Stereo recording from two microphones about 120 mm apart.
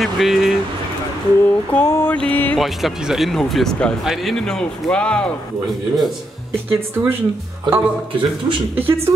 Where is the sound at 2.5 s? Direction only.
Centre (ahead or behind).